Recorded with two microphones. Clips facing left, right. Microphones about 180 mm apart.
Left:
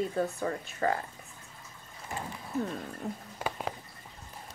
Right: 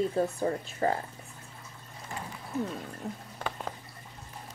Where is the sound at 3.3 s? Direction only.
10° left (ahead or behind).